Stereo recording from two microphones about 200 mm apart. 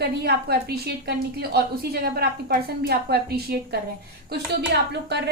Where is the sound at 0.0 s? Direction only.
55° right (ahead or behind).